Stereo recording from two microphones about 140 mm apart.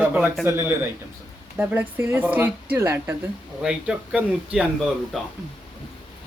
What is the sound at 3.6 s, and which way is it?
Speech, 5° right (ahead or behind).